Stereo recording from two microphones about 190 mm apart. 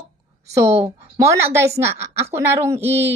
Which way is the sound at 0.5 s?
15° right (ahead or behind).